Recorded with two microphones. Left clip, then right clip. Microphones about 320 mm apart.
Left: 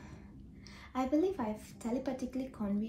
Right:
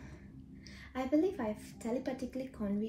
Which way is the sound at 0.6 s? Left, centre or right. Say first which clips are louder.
Left 1 dB; centre.